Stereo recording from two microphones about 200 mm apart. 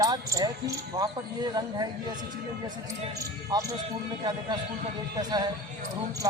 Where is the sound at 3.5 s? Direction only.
20° right (ahead or behind).